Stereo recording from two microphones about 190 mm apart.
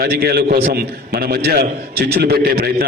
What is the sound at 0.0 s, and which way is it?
A man's voice, 55° right (ahead or behind).